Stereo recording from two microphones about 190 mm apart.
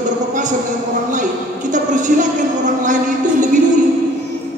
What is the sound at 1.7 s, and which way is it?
A man's voice, 40° right (ahead or behind).